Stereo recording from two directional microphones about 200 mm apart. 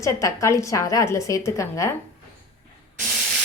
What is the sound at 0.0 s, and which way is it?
A woman's voice, 15° left (ahead or behind).